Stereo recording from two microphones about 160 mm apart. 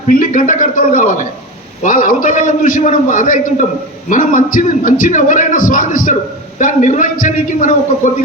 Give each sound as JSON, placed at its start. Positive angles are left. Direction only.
{"t": 0.1, "sound": "a man's voice", "side_deg": 55}